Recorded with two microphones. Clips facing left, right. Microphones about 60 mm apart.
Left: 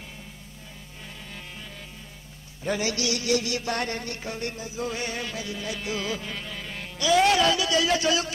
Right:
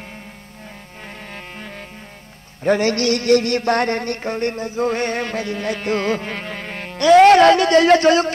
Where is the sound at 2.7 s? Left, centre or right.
Right.